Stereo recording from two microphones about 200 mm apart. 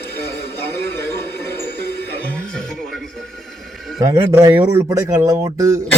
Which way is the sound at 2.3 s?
5° left (ahead or behind).